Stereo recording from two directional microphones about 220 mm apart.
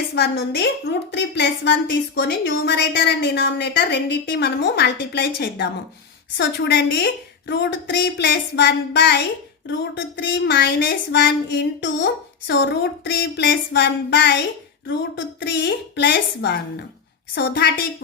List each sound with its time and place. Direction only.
0.2 s a woman's voice: 50° left (ahead or behind)